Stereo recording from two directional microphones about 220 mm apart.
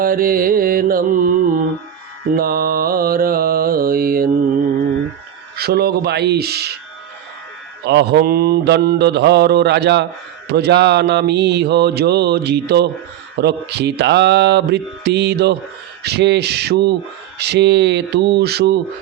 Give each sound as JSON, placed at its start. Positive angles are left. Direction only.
{"t": 0.0, "sound": "mantra", "side_deg": -40}
{"t": 5.5, "sound": "mantra", "side_deg": -45}
{"t": 7.9, "sound": "mantra", "side_deg": -50}